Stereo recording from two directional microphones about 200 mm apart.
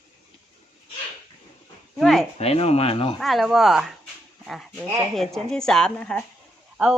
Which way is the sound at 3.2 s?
Centre (ahead or behind).